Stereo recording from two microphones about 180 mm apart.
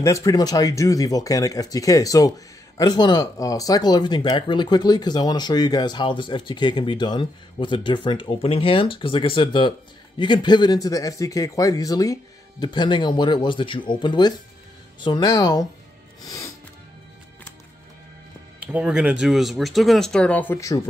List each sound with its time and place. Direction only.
0.0 s speech: 20° left (ahead or behind)
16.3 s music: 15° left (ahead or behind)
18.6 s speech: 5° right (ahead or behind); by 20.9 s 20° left (ahead or behind)